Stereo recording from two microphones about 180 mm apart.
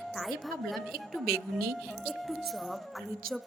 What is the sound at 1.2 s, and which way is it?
Speech, 60° right (ahead or behind).